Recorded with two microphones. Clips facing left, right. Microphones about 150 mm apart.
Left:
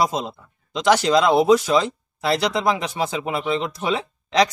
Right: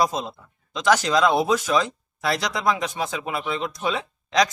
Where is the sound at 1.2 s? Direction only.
15° left (ahead or behind).